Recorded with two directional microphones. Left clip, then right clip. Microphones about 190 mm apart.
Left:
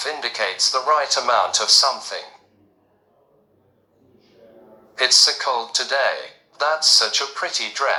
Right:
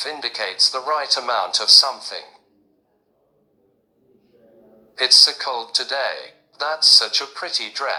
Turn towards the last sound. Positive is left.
turn(degrees=-25)  # may be behind; listen again after turning